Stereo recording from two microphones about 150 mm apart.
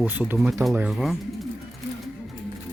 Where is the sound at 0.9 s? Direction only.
Centre (ahead or behind).